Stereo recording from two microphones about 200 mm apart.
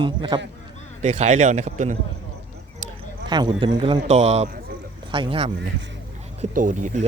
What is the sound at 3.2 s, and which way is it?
A man's voice, 20° right (ahead or behind).